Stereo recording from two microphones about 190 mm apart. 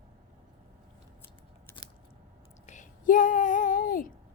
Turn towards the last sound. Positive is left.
turn(degrees=45)  # may be behind; listen again after turning